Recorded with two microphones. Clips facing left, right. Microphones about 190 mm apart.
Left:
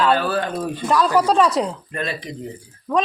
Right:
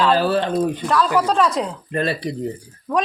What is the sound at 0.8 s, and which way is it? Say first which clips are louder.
Speech: left 5 dB; 5° left (ahead or behind).